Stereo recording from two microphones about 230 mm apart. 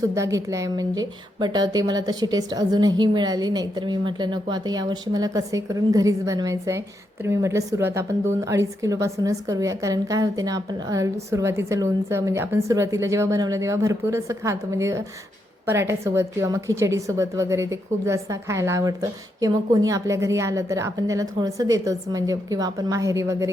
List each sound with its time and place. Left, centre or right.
0.1 s a woman's voice: centre